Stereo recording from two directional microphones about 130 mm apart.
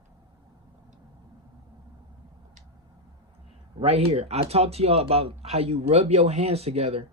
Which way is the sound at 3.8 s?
50° right (ahead or behind).